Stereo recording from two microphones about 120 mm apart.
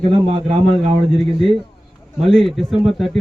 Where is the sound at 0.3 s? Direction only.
60° right (ahead or behind).